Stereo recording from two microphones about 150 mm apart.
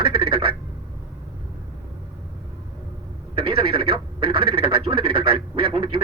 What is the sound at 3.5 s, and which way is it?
Speech, 40° right (ahead or behind).